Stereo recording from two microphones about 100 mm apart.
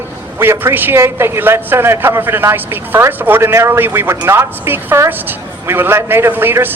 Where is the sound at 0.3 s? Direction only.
25° right (ahead or behind).